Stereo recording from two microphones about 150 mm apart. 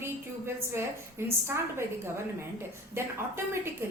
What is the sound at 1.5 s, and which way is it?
A woman's voice, 20° right (ahead or behind).